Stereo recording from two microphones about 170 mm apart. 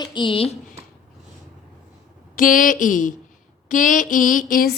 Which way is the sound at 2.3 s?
55° left (ahead or behind).